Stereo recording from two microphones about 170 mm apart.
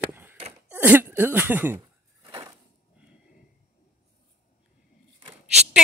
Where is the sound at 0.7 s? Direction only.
10° right (ahead or behind).